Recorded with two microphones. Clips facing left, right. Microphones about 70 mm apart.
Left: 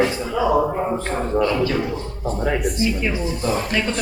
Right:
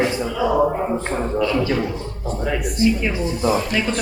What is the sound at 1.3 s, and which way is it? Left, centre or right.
Speech, left.